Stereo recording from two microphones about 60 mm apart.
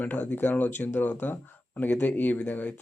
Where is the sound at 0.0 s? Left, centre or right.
Left.